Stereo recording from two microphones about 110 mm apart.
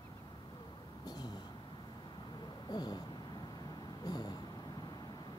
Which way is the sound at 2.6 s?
40° left (ahead or behind).